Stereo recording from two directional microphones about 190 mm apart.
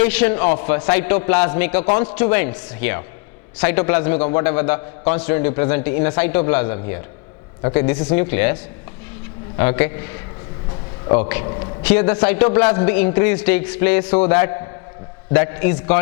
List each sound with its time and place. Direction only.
0.0 s a man's voice: 10° left (ahead or behind)
9.6 s a man's voice: 10° left (ahead or behind)
11.4 s a man's voice: 25° left (ahead or behind)
11.8 s a man's voice: 10° left (ahead or behind)